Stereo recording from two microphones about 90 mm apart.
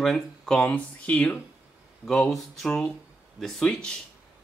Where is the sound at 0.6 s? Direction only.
15° left (ahead or behind).